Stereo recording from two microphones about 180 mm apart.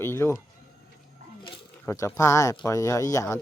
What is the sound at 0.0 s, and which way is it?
Speech, 15° left (ahead or behind).